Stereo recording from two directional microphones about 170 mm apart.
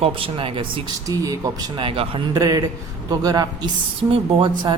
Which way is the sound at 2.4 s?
20° right (ahead or behind).